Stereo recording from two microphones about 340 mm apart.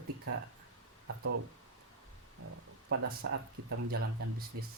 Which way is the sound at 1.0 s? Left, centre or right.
Right.